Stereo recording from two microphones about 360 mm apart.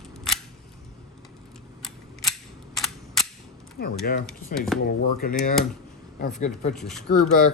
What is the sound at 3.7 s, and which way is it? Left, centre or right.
Speech, left.